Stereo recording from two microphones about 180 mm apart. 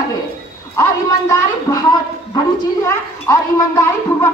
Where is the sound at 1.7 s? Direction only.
20° left (ahead or behind).